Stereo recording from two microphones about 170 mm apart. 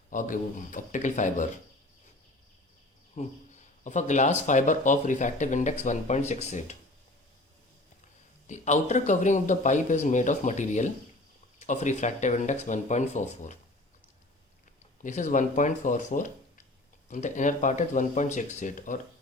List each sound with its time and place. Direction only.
0.1 s speech: 50° left (ahead or behind)
3.2 s speech: 45° left (ahead or behind)
8.4 s speech: 45° left (ahead or behind)
15.0 s speech: 45° left (ahead or behind)